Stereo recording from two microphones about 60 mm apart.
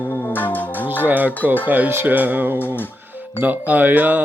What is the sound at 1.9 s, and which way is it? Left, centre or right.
Speech, right.